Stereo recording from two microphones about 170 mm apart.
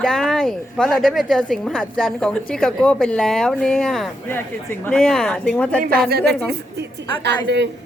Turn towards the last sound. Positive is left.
turn(degrees=-85)